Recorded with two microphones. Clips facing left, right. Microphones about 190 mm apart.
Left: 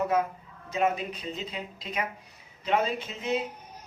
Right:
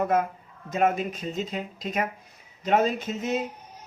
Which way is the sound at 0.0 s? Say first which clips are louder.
Right 2 dB; 50° right (ahead or behind).